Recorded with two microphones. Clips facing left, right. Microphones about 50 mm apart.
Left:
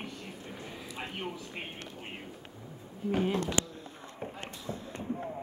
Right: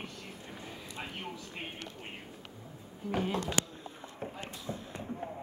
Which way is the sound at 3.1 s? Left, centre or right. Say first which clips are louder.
Left 3 dB; centre.